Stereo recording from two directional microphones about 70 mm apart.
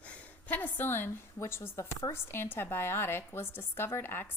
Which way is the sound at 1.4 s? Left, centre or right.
Left.